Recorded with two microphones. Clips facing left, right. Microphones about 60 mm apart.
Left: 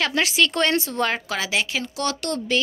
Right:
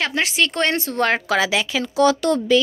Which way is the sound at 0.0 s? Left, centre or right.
Right.